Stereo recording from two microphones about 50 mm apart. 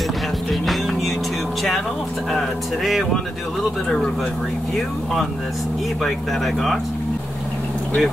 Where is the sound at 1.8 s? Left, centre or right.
Centre.